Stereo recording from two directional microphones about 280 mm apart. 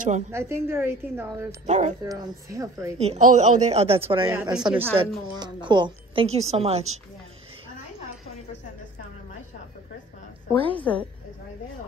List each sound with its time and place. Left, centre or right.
0.3 s a woman's voice: centre
1.7 s a woman's voice: right
2.0 s a woman's voice: centre
3.0 s a woman's voice: right
4.3 s a woman's voice: centre
10.5 s a woman's voice: centre
10.8 s a woman's voice: centre